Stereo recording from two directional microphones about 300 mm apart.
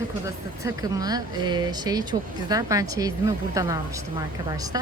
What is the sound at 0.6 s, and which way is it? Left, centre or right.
A woman's voice, centre.